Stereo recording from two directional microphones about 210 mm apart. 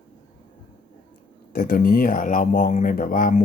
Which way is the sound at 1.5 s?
45° left (ahead or behind).